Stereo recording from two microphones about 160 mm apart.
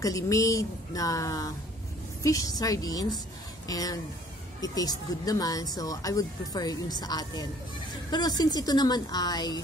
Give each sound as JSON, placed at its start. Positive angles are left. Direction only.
{"t": 0.0, "sound": "speech", "side_deg": 20}